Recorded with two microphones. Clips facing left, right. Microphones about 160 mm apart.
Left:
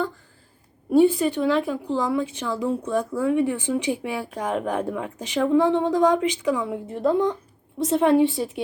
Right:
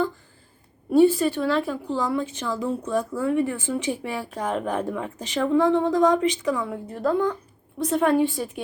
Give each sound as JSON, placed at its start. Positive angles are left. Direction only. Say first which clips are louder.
{"t": 0.9, "sound": "a woman's voice", "louder": "even", "side_deg": 15}